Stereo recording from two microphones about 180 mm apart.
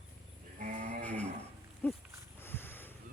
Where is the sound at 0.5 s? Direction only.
45° right (ahead or behind).